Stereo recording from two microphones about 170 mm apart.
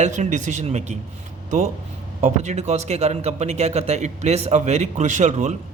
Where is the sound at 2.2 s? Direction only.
40° right (ahead or behind).